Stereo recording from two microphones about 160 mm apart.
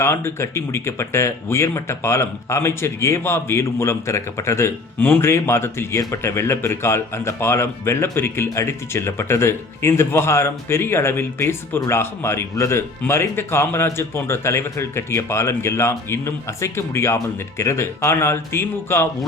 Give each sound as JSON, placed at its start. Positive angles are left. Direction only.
{"t": 0.0, "sound": "speech", "side_deg": 15}